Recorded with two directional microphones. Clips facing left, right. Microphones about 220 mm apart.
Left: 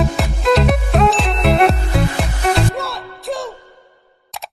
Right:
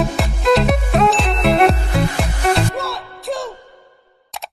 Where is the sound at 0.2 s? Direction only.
Centre (ahead or behind).